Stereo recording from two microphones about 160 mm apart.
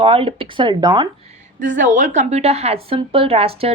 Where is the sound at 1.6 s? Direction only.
55° right (ahead or behind).